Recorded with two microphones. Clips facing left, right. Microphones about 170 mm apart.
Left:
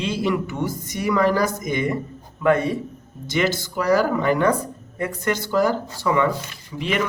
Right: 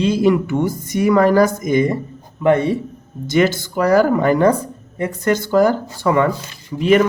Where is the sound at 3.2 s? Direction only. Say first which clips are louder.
Right 6 dB; 45° right (ahead or behind).